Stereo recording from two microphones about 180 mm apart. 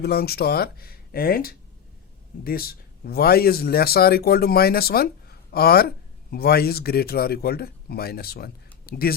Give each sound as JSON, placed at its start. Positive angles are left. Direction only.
{"t": 0.0, "sound": "speech", "side_deg": 60}